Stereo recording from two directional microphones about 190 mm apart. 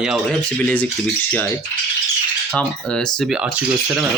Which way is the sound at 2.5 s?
5° left (ahead or behind).